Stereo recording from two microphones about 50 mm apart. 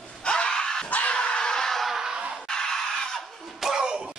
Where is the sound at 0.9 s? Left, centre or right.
Left; by 1.9 s centre.